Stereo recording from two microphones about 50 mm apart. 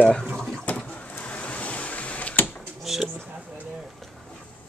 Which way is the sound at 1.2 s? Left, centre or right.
Left.